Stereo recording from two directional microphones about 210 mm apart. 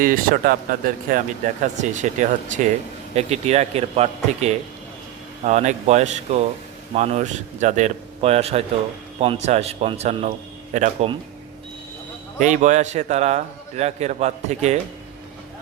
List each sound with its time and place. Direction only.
0.0 s a man's voice: 40° right (ahead or behind)
12.4 s a man's voice: 35° right (ahead or behind)